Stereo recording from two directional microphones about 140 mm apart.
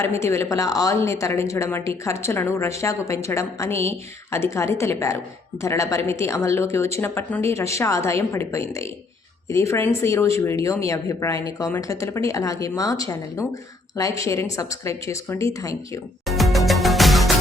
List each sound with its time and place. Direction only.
0.0 s speech: 20° left (ahead or behind)
16.2 s music: centre (ahead or behind)